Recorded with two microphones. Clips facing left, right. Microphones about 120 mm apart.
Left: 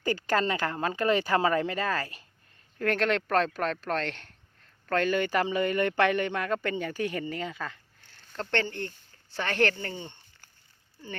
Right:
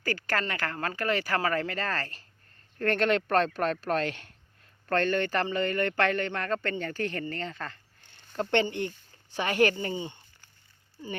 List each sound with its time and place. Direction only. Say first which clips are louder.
0.0 s speech: left 4 dB; 20° left (ahead or behind); by 4.4 s 5° right (ahead or behind)
4.9 s speech: even; 5° left (ahead or behind)
8.3 s speech: right 4 dB; 15° right (ahead or behind)